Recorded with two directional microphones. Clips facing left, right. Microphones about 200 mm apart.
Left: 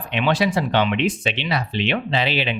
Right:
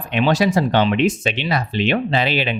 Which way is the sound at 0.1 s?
40° right (ahead or behind).